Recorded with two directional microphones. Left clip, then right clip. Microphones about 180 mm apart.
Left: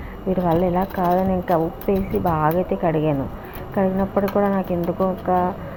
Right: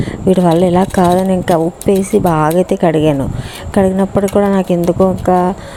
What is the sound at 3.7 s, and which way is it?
Speech, 75° right (ahead or behind).